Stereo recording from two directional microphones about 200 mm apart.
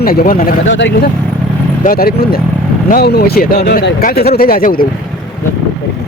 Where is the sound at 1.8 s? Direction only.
45° left (ahead or behind).